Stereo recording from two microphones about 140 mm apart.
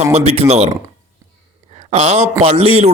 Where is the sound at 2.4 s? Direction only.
45° right (ahead or behind).